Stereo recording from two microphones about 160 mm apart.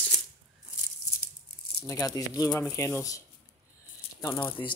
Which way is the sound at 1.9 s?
20° left (ahead or behind).